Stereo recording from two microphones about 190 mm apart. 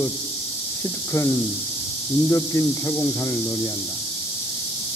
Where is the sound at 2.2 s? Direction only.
15° left (ahead or behind).